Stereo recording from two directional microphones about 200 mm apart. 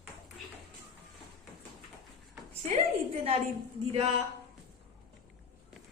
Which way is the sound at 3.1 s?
30° right (ahead or behind).